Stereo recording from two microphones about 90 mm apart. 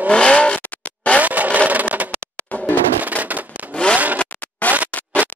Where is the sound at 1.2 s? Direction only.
15° right (ahead or behind).